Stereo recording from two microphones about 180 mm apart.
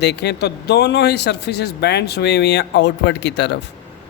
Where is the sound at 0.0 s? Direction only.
70° left (ahead or behind).